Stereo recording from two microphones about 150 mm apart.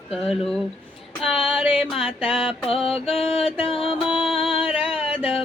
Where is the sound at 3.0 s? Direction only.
40° left (ahead or behind).